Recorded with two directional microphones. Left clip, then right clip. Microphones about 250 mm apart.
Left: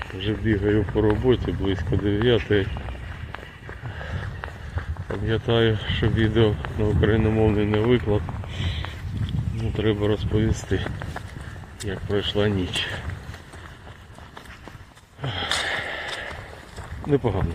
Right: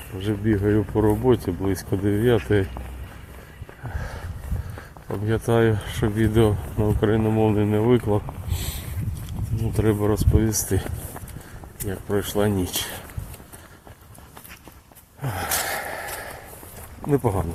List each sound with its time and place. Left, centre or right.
0.2 s speech: centre
5.0 s speech: centre
5.3 s speech: centre
9.7 s speech: right
15.2 s a sound: centre
17.0 s speech: centre